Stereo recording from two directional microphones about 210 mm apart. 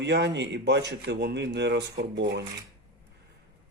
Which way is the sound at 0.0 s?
55° right (ahead or behind).